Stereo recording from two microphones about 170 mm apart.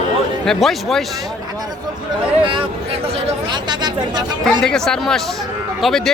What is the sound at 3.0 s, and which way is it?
Speech, 30° right (ahead or behind).